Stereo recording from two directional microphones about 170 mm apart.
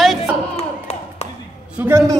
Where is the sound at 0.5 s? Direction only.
40° left (ahead or behind).